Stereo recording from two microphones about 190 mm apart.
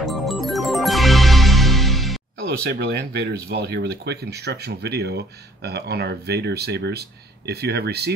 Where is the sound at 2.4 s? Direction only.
60° right (ahead or behind).